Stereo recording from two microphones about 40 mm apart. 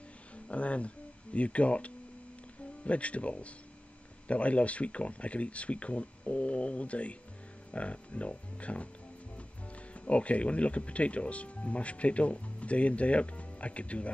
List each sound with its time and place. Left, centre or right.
0.5 s speech: left
9.9 s speech: left